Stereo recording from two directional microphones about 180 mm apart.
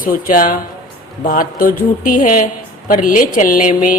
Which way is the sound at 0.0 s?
50° left (ahead or behind).